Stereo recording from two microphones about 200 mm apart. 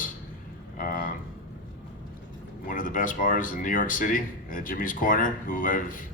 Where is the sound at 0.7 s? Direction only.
45° left (ahead or behind).